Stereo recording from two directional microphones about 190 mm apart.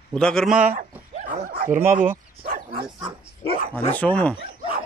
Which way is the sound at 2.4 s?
50° right (ahead or behind).